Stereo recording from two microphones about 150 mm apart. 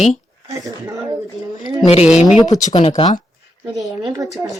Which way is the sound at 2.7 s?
35° left (ahead or behind).